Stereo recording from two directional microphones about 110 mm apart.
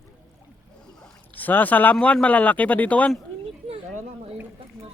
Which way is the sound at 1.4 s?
15° left (ahead or behind).